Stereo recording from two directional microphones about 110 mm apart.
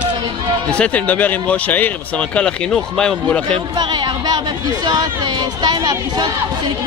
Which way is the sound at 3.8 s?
45° right (ahead or behind).